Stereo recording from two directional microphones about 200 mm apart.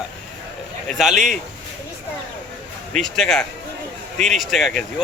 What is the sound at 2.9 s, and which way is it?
A man's voice, centre (ahead or behind).